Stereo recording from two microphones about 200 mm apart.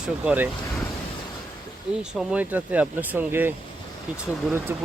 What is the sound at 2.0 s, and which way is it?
Speech, 5° right (ahead or behind).